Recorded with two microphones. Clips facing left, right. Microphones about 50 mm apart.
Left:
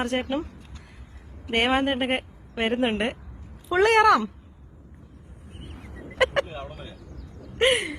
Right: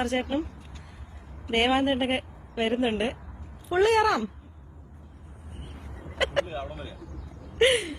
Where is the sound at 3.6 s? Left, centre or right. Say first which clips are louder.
Left 4 dB; left.